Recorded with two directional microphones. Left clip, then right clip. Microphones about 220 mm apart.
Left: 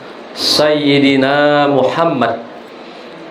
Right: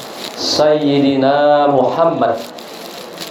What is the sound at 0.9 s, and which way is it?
Mantra, 40° left (ahead or behind).